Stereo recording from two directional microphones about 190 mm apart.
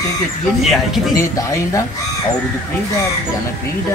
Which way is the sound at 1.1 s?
15° left (ahead or behind).